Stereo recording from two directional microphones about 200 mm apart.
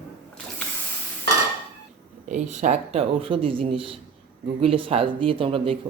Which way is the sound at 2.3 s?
35° right (ahead or behind).